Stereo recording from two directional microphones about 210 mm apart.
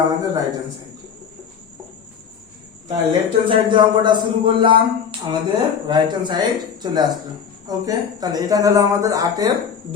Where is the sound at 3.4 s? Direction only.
20° right (ahead or behind).